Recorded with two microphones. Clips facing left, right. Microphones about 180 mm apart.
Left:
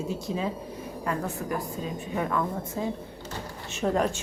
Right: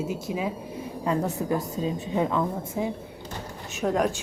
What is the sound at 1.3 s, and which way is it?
A woman's voice, 20° right (ahead or behind).